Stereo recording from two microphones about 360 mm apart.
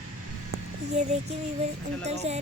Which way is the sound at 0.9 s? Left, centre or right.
Centre.